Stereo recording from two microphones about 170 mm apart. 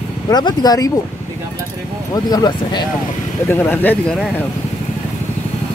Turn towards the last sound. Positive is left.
turn(degrees=10)  # may be behind; listen again after turning